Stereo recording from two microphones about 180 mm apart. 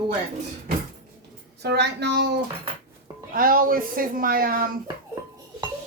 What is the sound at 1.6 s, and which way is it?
Speech, 70° right (ahead or behind).